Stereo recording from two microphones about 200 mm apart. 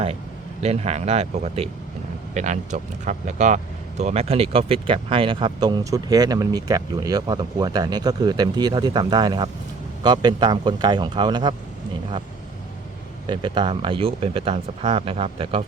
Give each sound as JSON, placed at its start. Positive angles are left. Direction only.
{"t": 0.6, "sound": "speech", "side_deg": -30}
{"t": 13.2, "sound": "speech", "side_deg": -25}